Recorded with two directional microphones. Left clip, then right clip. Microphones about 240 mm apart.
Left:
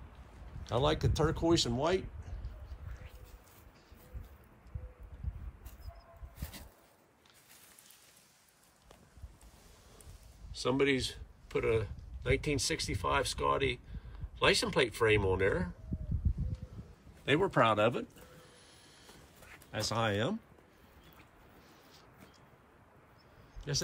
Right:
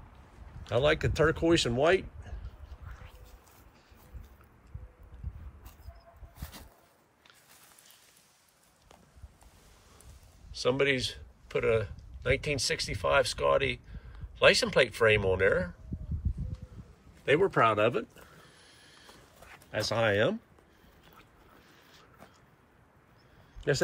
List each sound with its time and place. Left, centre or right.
0.7 s speech: centre
10.5 s speech: centre
17.2 s speech: centre
19.4 s speech: centre